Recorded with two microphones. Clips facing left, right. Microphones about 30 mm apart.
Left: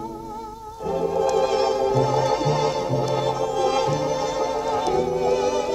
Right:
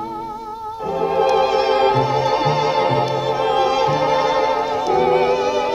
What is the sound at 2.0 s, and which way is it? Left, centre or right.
Music, right.